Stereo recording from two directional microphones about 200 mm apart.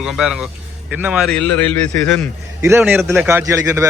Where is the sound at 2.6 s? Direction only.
10° right (ahead or behind).